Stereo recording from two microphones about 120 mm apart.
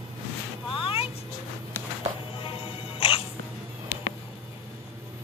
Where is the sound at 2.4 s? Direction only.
50° left (ahead or behind).